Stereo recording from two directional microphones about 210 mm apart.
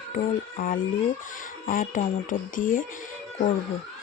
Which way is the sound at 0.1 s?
40° left (ahead or behind).